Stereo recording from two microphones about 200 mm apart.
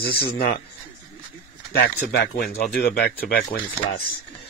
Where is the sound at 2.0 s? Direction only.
50° left (ahead or behind).